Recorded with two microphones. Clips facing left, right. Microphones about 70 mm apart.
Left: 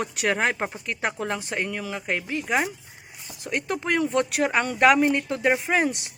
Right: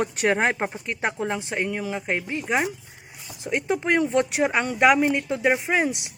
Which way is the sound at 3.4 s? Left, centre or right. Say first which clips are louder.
Right 3 dB; centre.